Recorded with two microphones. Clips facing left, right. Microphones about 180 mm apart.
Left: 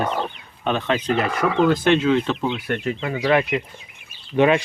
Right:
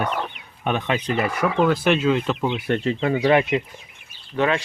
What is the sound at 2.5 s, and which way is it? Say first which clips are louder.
Speech: right 2 dB; 25° right (ahead or behind).